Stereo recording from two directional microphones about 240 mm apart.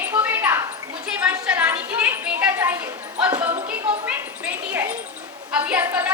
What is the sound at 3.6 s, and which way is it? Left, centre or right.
Music, right.